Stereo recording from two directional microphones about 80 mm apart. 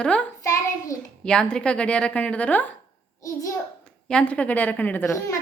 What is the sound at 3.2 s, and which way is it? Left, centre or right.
Speech, left.